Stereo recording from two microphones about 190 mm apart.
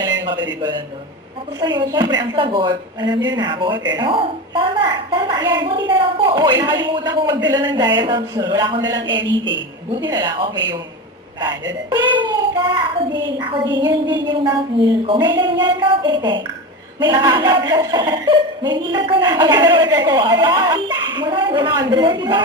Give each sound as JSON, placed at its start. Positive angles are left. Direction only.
{"t": 1.6, "sound": "speech", "side_deg": -25}
{"t": 9.9, "sound": "speech", "side_deg": -25}